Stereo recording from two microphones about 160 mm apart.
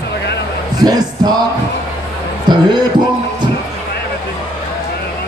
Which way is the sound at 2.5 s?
30° right (ahead or behind).